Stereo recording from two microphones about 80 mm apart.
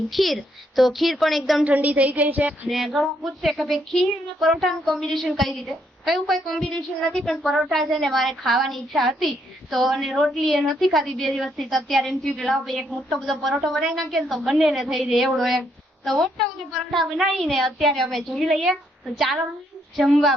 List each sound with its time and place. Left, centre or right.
0.1 s speech: centre
1.6 s a woman's voice: centre
2.6 s speech: centre
20.0 s speech: centre